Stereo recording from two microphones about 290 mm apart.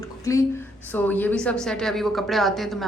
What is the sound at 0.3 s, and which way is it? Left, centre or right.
A woman's voice, centre.